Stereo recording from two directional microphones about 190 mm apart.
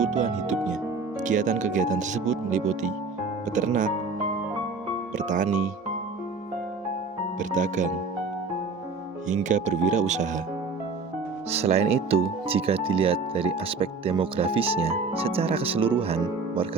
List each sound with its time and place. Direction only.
0.0 s speech: 40° right (ahead or behind)
5.1 s speech: 40° right (ahead or behind)
7.3 s speech: 40° right (ahead or behind)
9.3 s speech: 40° right (ahead or behind)
11.5 s speech: 35° right (ahead or behind)